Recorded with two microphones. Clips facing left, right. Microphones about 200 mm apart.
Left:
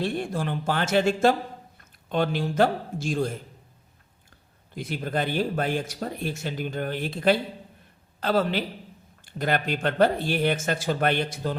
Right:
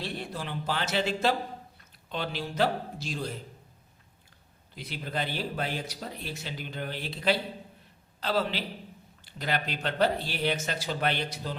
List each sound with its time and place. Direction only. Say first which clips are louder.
0.0 s a man's voice: left 8 dB; 50° left (ahead or behind)
4.7 s speech: left 7 dB; 50° left (ahead or behind)